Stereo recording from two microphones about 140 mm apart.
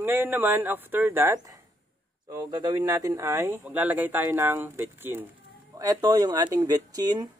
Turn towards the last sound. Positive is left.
turn(degrees=-25)  # may be behind; listen again after turning